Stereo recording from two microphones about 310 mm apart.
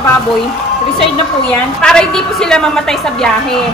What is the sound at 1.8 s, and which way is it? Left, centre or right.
A woman's voice, centre.